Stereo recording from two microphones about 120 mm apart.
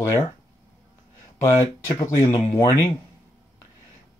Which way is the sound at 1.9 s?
25° left (ahead or behind).